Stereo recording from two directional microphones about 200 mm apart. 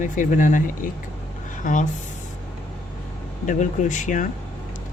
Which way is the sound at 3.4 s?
40° left (ahead or behind).